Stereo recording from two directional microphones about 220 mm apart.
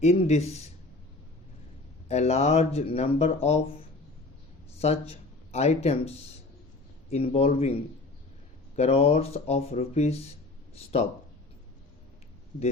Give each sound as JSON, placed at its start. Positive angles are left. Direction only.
{"t": 0.0, "sound": "speech", "side_deg": 30}
{"t": 2.0, "sound": "speech", "side_deg": 30}
{"t": 4.8, "sound": "speech", "side_deg": 30}
{"t": 7.1, "sound": "speech", "side_deg": 30}